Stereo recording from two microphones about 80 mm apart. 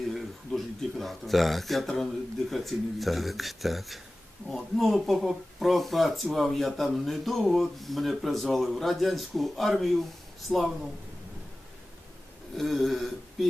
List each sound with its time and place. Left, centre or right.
0.0 s speech: centre
12.5 s speech: centre